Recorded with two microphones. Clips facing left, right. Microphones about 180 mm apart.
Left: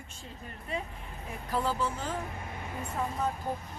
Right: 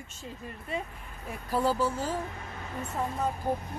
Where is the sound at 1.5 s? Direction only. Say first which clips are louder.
Right 4 dB; 10° right (ahead or behind).